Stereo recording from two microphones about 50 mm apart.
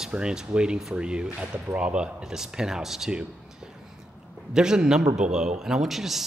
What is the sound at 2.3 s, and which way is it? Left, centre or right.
Speech, centre.